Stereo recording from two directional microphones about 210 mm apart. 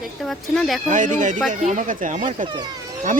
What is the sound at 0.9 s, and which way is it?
Speech, 35° right (ahead or behind).